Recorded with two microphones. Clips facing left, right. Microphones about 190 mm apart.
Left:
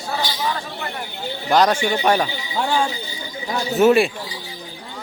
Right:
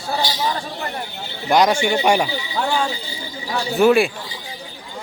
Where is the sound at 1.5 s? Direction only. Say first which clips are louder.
Right 1 dB; 10° right (ahead or behind).